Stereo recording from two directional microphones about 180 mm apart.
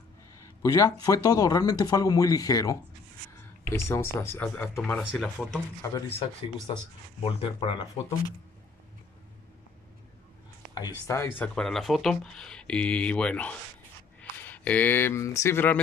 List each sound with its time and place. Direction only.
0.6 s speech: 15° left (ahead or behind)
5.8 s speech: 15° left (ahead or behind)
6.7 s speech: 35° left (ahead or behind)
10.7 s speech: 20° left (ahead or behind)